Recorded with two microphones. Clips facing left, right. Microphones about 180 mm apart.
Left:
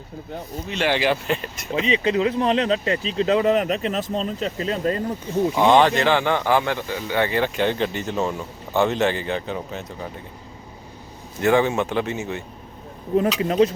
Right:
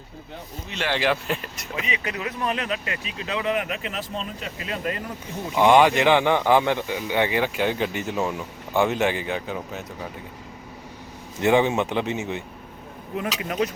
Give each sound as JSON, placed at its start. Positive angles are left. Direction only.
{"t": 0.9, "sound": "speech", "side_deg": 5}
{"t": 1.7, "sound": "speech", "side_deg": 25}
{"t": 5.6, "sound": "speech", "side_deg": -10}
{"t": 11.3, "sound": "speech", "side_deg": -20}
{"t": 13.4, "sound": "speech", "side_deg": 30}